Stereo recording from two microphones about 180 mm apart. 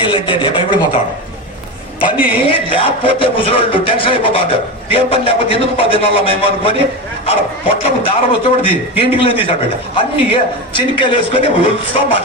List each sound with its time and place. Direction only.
0.0 s a sound: 25° left (ahead or behind)
2.1 s speech: 5° right (ahead or behind)
2.5 s a man's voice: 30° left (ahead or behind)